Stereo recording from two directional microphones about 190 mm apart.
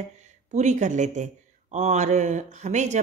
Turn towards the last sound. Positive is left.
turn(degrees=-40)  # may be behind; listen again after turning